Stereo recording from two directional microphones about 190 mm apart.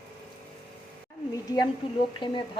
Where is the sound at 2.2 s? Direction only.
25° left (ahead or behind).